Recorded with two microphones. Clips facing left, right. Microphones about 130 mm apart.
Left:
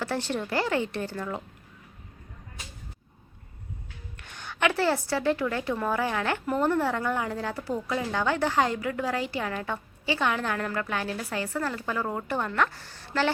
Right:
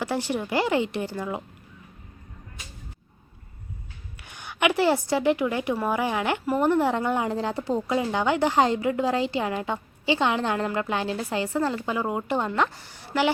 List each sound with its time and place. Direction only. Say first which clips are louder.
0.0 s a woman's voice: right 2 dB; 10° right (ahead or behind)
4.2 s a woman's voice: right 2 dB; 10° right (ahead or behind)